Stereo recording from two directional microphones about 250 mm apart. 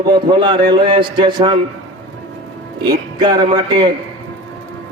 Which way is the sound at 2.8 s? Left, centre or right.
Centre.